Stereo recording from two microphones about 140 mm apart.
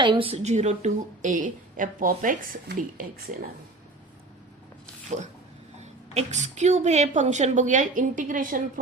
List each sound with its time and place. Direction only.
0.0 s a woman's voice: 35° right (ahead or behind); by 3.1 s 80° right
5.0 s a woman's voice: 55° right (ahead or behind); by 8.8 s 75° right (ahead or behind)